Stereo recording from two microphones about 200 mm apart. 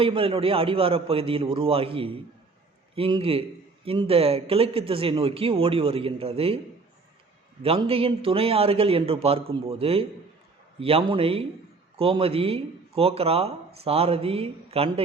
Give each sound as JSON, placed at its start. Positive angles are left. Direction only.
{"t": 0.0, "sound": "speech", "side_deg": -25}
{"t": 7.6, "sound": "speech", "side_deg": -30}